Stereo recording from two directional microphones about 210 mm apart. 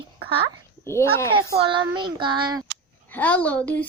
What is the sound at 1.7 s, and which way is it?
Child singing, 20° right (ahead or behind).